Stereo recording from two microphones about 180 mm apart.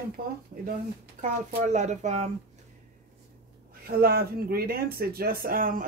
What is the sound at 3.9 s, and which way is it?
Speech, 55° right (ahead or behind).